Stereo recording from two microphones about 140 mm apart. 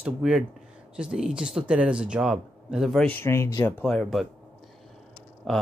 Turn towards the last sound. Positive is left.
turn(degrees=5)  # may be behind; listen again after turning